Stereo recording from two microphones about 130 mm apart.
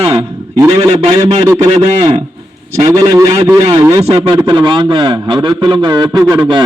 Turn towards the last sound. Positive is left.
turn(degrees=-35)  # may be behind; listen again after turning